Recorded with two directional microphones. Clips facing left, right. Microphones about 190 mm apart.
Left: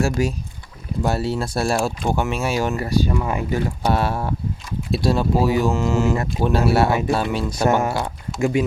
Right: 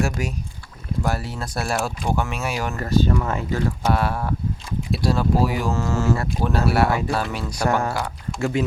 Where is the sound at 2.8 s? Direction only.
10° left (ahead or behind).